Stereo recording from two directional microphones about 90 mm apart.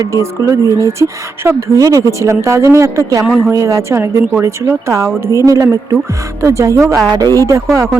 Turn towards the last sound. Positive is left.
turn(degrees=-35)  # may be behind; listen again after turning